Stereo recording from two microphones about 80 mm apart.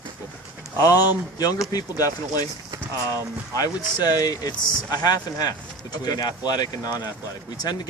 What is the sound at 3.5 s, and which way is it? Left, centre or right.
Speech, left.